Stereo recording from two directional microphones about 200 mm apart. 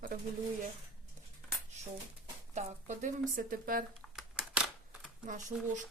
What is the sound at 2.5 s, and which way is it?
Speech, 40° right (ahead or behind).